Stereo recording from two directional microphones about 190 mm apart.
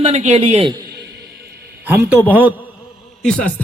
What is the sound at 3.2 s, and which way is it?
Speech, 5° left (ahead or behind).